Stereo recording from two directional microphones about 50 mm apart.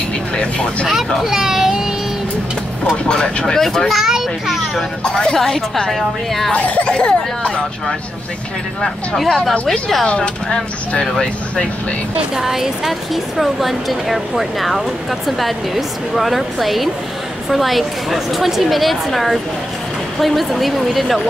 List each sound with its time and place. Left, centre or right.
0.4 s speech: centre
0.8 s speech: centre
3.1 s speech: centre
3.9 s a child's voice: centre
5.0 s speech: centre
6.5 s speech: left
8.8 s speech: centre
10.0 s speech: centre
12.4 s speech: centre